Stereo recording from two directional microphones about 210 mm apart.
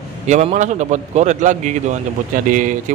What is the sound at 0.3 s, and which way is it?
A man's voice, 35° right (ahead or behind).